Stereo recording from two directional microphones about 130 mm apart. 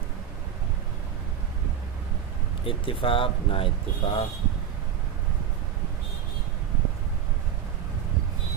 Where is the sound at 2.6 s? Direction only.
45° left (ahead or behind).